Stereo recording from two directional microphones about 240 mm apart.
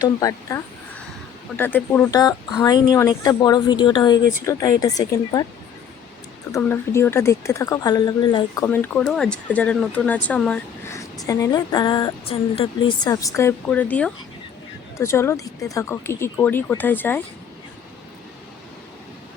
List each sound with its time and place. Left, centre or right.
0.0 s a woman's voice: centre
6.5 s speech: centre